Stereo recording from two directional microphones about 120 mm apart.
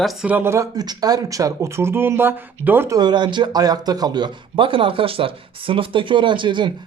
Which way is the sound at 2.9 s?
35° right (ahead or behind).